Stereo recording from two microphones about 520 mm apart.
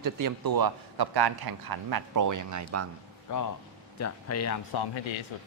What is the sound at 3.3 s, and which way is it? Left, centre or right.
Speech, left.